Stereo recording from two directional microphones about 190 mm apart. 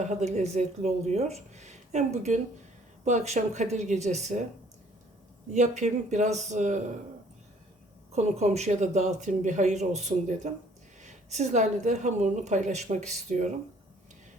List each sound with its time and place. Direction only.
0.0 s a woman's voice: 35° right (ahead or behind)
5.5 s a woman's voice: 40° right (ahead or behind)
8.1 s a woman's voice: 35° right (ahead or behind)